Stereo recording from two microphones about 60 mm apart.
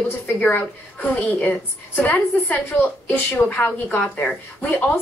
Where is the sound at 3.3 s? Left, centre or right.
Left.